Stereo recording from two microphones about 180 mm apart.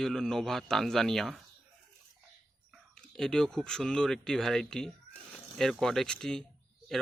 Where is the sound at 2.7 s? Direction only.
5° left (ahead or behind).